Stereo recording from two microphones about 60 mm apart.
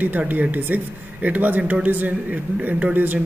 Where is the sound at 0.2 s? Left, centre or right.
Right.